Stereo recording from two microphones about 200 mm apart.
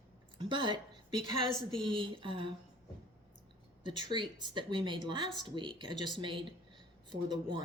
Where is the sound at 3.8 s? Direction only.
25° right (ahead or behind).